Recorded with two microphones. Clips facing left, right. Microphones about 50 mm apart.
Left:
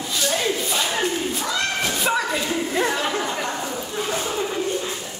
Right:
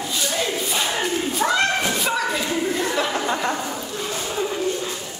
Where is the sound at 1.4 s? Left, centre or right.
Right.